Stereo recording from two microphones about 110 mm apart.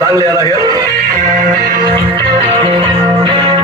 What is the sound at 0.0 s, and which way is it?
Speech, 30° right (ahead or behind).